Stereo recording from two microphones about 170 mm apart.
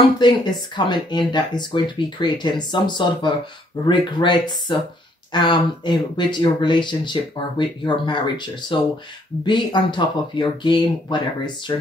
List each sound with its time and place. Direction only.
0.2 s speech: 25° left (ahead or behind)